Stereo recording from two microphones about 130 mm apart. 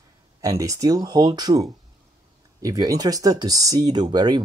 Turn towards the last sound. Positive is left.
turn(degrees=-30)  # may be behind; listen again after turning